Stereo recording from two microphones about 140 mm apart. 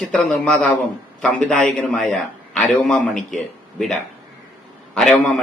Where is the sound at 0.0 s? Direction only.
5° left (ahead or behind).